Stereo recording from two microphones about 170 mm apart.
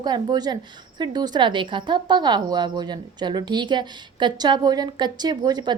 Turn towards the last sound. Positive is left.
turn(degrees=-25)  # may be behind; listen again after turning